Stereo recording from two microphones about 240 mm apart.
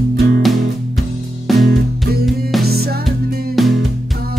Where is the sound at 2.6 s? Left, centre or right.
Right.